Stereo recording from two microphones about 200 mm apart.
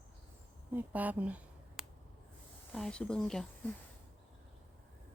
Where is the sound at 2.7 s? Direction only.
5° left (ahead or behind).